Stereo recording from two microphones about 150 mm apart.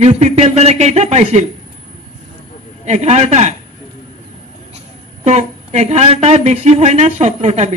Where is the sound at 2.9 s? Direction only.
50° right (ahead or behind).